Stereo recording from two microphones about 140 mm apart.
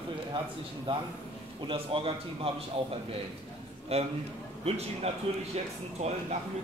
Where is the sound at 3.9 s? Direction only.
45° right (ahead or behind).